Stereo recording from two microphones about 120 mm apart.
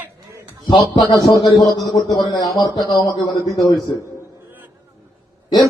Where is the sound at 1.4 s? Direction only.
35° left (ahead or behind).